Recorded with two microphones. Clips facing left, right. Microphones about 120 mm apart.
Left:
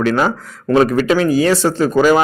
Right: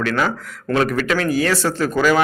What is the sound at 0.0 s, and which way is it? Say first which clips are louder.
Speech: left 5 dB; 25° left (ahead or behind).